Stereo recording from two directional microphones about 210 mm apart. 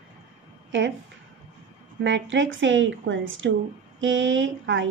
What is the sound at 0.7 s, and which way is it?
Speech, 60° right (ahead or behind).